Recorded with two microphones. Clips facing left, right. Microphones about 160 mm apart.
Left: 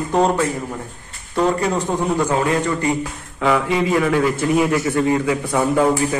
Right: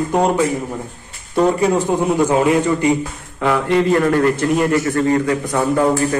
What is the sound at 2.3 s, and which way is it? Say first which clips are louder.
Speech: right 4 dB; 20° right (ahead or behind).